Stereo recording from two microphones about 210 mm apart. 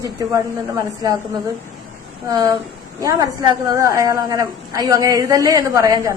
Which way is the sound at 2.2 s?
15° right (ahead or behind).